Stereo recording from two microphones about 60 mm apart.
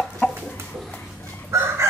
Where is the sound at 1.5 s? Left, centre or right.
Right.